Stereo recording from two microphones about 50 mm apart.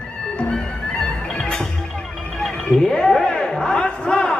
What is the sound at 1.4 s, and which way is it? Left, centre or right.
Music, centre.